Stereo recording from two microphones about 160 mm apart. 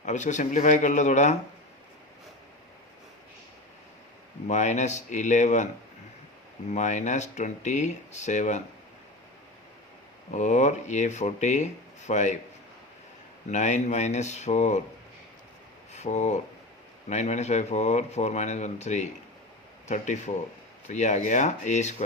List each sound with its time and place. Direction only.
0.0 s speech: 50° left (ahead or behind)
4.4 s speech: 50° left (ahead or behind)
6.7 s speech: 50° left (ahead or behind)
10.3 s speech: 50° left (ahead or behind)
13.5 s speech: 50° left (ahead or behind)
15.9 s speech: 45° left (ahead or behind)